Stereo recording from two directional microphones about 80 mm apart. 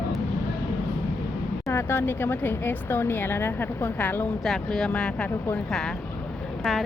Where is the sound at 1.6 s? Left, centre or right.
Left.